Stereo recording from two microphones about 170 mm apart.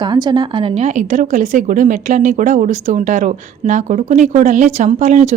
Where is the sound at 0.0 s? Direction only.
25° right (ahead or behind).